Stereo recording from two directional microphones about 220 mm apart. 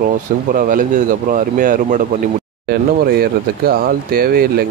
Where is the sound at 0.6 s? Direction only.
35° right (ahead or behind).